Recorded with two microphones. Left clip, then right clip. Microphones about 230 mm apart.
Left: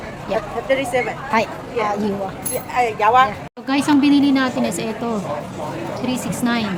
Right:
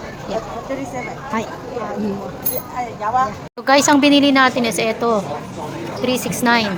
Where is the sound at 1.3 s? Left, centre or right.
Left.